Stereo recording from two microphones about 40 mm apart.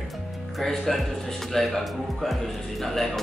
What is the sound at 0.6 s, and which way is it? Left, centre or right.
Speech, centre.